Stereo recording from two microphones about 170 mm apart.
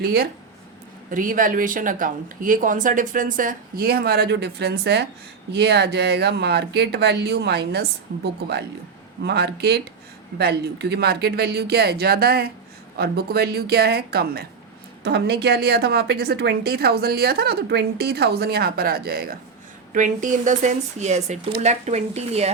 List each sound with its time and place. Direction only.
0.0 s speech: 65° right (ahead or behind)
1.1 s a woman's voice: 55° right (ahead or behind)
19.9 s speech: 50° right (ahead or behind)